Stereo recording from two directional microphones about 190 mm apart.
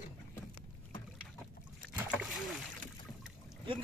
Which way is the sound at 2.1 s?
Centre (ahead or behind).